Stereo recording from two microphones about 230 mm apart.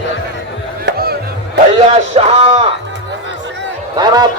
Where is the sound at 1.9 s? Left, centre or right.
Right.